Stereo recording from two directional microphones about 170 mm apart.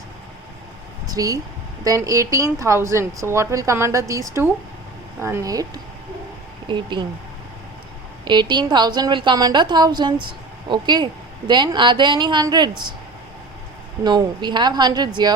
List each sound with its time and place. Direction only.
1.0 s a woman's voice: 20° right (ahead or behind)
6.7 s a woman's voice: 25° right (ahead or behind)
8.2 s a woman's voice: 25° right (ahead or behind)
14.0 s a woman's voice: 25° right (ahead or behind)